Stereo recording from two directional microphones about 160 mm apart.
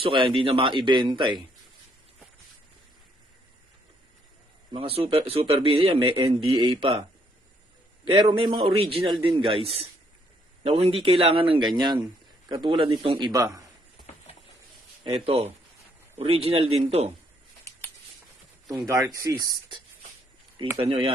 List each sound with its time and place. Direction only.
0.0 s a man's voice: 35° right (ahead or behind)
4.7 s a man's voice: 35° right (ahead or behind)
8.1 s a man's voice: 30° right (ahead or behind)
15.0 s a man's voice: 35° right (ahead or behind)
18.9 s a man's voice: 20° right (ahead or behind)